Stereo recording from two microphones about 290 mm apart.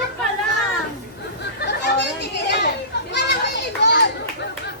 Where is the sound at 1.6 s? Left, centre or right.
Left.